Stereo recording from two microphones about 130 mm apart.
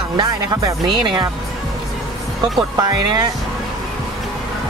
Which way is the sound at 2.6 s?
30° right (ahead or behind).